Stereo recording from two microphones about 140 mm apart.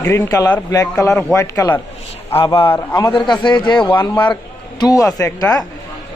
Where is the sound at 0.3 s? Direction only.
25° left (ahead or behind).